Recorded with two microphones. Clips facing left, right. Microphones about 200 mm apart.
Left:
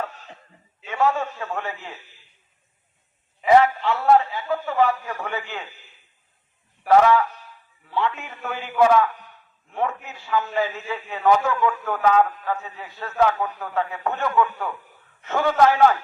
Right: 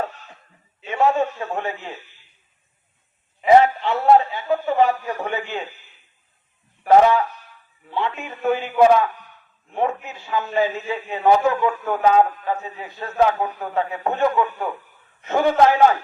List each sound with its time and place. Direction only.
0.9 s a man's voice: 20° right (ahead or behind)
3.4 s a man's voice: 25° right (ahead or behind)
6.8 s a man's voice: 20° right (ahead or behind)